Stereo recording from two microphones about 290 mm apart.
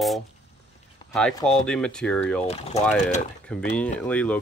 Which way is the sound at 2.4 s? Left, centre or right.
Left.